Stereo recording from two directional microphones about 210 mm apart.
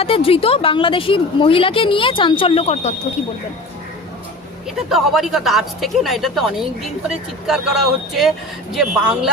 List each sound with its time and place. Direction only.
0.0 s a woman's voice: 25° left (ahead or behind)
4.9 s speech: centre (ahead or behind)